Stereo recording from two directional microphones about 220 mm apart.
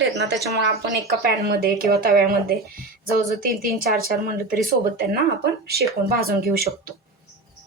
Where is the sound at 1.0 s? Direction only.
45° right (ahead or behind).